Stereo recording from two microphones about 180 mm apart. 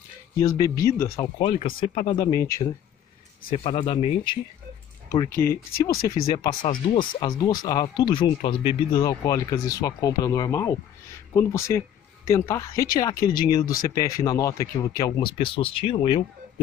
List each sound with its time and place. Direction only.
0.4 s speech: 20° left (ahead or behind)
3.5 s speech: 30° left (ahead or behind)
5.1 s speech: 15° left (ahead or behind)
5.7 s speech: 55° left (ahead or behind)
6.3 s speech: 25° left (ahead or behind)
12.7 s speech: 55° left (ahead or behind)
13.8 s speech: 20° left (ahead or behind)